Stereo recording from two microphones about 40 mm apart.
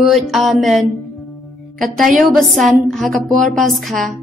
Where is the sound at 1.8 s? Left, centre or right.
Centre.